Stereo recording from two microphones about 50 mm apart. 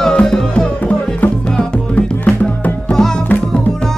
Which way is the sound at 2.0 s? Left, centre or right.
Left.